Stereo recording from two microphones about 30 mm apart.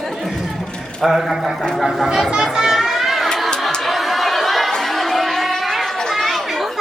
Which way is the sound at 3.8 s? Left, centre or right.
Centre.